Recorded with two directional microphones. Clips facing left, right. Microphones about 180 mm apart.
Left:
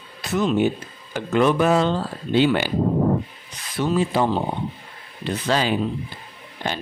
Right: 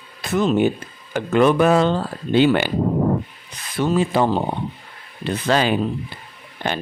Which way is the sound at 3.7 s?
55° right (ahead or behind).